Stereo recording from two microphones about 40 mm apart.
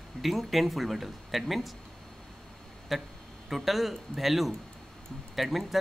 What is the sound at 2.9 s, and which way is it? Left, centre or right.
Speech, centre.